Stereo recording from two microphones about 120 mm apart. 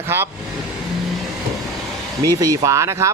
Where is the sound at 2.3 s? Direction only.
30° right (ahead or behind).